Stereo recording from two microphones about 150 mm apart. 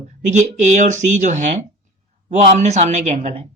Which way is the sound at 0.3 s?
55° right (ahead or behind).